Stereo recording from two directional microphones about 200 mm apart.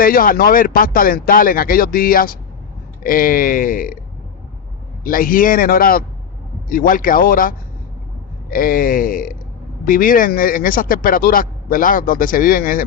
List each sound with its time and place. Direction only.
0.0 s speech: 45° left (ahead or behind)
5.0 s speech: 45° left (ahead or behind)